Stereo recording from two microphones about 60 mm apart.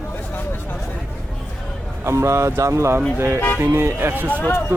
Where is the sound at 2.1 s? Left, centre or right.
Right.